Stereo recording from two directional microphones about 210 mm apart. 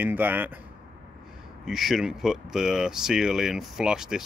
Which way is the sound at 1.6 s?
Centre (ahead or behind).